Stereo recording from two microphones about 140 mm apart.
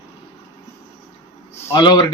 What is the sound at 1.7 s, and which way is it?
Speech, 30° left (ahead or behind).